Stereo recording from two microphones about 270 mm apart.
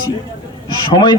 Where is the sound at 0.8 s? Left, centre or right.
Centre.